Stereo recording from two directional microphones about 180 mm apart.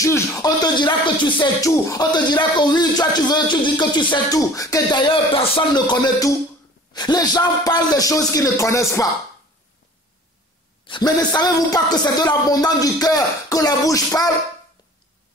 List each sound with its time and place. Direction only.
0.0 s speech: 15° left (ahead or behind)
10.9 s speech: 25° left (ahead or behind)